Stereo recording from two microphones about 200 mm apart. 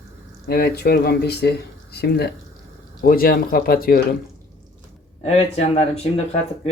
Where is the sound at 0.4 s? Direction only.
50° left (ahead or behind).